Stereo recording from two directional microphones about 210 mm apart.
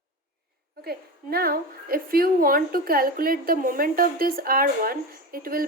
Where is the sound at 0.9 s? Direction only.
45° right (ahead or behind).